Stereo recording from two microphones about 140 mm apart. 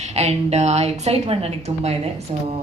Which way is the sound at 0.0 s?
50° right (ahead or behind).